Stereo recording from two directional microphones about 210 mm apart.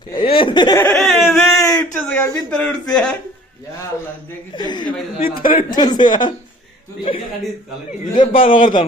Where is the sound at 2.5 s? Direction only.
5° left (ahead or behind).